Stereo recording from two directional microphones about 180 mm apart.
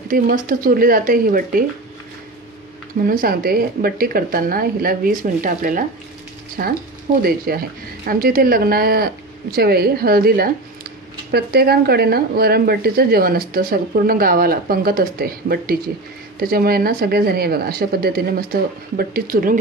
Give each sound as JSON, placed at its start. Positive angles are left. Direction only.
{"t": 0.1, "sound": "speech", "side_deg": -50}
{"t": 3.1, "sound": "speech", "side_deg": -55}